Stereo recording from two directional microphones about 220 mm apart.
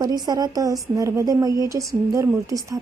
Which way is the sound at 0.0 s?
20° right (ahead or behind).